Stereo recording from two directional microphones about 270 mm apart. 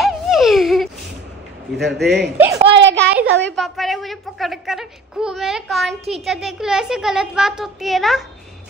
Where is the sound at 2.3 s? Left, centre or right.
Centre.